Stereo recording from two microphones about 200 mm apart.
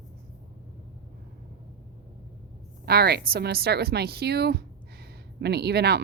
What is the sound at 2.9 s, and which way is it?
A woman's voice, 50° right (ahead or behind).